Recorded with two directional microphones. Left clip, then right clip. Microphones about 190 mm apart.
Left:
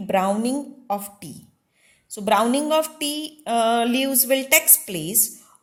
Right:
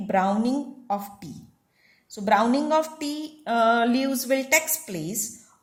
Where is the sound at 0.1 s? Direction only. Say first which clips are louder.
Left 2 dB; 40° left (ahead or behind).